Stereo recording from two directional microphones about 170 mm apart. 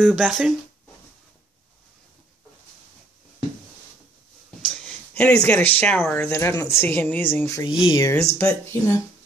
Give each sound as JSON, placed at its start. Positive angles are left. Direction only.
{"t": 0.0, "sound": "speech", "side_deg": 0}
{"t": 5.1, "sound": "speech", "side_deg": 10}
{"t": 6.2, "sound": "speech", "side_deg": 15}